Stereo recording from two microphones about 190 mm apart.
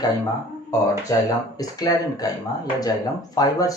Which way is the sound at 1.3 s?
20° left (ahead or behind).